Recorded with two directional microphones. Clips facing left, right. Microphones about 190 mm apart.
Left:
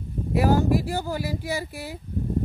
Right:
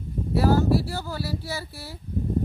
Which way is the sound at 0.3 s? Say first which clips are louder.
Even; 15° left (ahead or behind).